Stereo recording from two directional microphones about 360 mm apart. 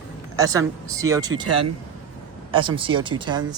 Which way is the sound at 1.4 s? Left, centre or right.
Right.